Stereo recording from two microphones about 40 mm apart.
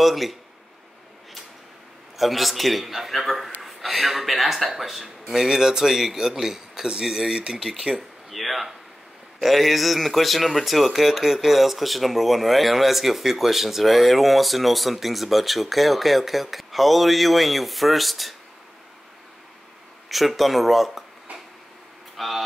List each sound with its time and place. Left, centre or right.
0.0 s speech: centre
2.1 s a man's voice: centre
7.9 s speech: right
8.3 s speech: centre
20.1 s speech: centre
22.1 s a sound: centre